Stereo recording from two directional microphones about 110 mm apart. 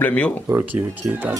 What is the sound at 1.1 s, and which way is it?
Speech, 15° right (ahead or behind).